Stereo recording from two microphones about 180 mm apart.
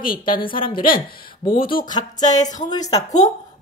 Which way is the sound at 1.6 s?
25° left (ahead or behind).